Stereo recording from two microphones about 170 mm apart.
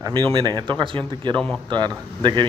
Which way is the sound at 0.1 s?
25° right (ahead or behind).